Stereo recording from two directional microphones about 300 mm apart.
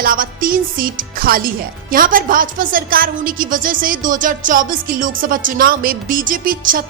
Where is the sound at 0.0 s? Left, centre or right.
Right.